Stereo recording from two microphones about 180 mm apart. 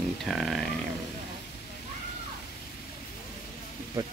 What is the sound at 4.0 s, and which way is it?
Speech, 20° right (ahead or behind).